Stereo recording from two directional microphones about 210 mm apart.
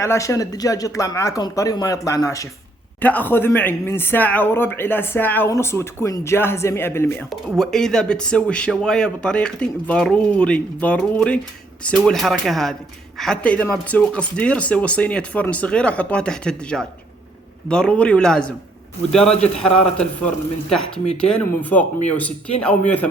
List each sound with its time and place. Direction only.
0.0 s speech: 15° left (ahead or behind)